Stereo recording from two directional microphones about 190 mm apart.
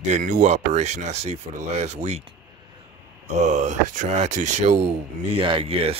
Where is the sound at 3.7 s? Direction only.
40° right (ahead or behind).